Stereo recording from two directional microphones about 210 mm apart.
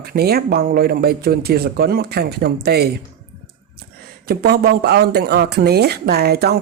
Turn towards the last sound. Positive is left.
turn(degrees=-50)  # may be behind; listen again after turning